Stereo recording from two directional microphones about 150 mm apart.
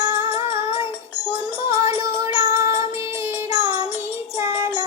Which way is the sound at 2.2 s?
20° right (ahead or behind).